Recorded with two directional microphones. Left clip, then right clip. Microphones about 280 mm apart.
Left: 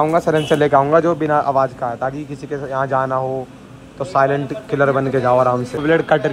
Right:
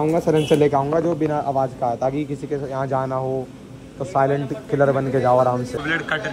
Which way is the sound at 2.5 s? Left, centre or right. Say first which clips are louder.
Left 6 dB; centre.